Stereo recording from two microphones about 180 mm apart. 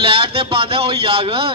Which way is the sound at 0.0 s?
30° right (ahead or behind).